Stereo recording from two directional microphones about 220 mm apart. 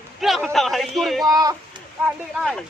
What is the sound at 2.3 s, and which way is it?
Speech, centre (ahead or behind).